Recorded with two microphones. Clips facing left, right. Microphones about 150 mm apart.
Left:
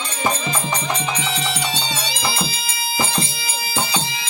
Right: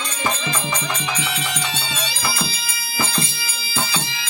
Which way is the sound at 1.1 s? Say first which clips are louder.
Left 2 dB; 30° left (ahead or behind).